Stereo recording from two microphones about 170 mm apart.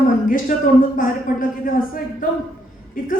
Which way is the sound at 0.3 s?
50° left (ahead or behind).